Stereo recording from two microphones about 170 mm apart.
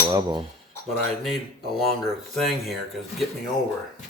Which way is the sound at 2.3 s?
Centre (ahead or behind).